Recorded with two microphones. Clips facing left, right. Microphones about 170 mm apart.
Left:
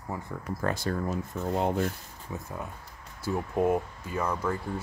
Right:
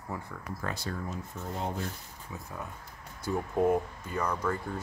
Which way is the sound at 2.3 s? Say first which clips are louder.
Left 6 dB; 30° left (ahead or behind).